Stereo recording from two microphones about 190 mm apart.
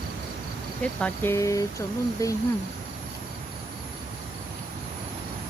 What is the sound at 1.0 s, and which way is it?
Speech, 10° left (ahead or behind).